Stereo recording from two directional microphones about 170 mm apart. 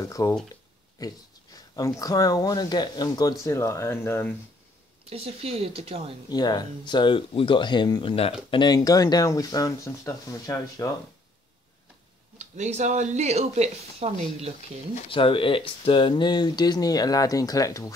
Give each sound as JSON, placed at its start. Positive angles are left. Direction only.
{"t": 0.0, "sound": "speech", "side_deg": 20}
{"t": 0.9, "sound": "a sound", "side_deg": 20}
{"t": 2.0, "sound": "speech", "side_deg": 20}
{"t": 5.1, "sound": "speech", "side_deg": -35}
{"t": 6.2, "sound": "speech", "side_deg": 25}
{"t": 12.4, "sound": "speech", "side_deg": -40}
{"t": 15.0, "sound": "speech", "side_deg": 30}